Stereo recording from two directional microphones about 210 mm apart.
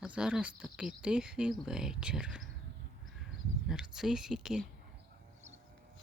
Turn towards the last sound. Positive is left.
turn(degrees=0)  # may be behind; listen again after turning